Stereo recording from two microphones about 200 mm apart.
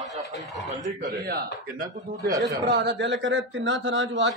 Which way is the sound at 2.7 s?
60° right (ahead or behind).